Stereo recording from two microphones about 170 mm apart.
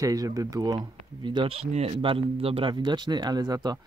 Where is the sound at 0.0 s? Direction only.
20° right (ahead or behind).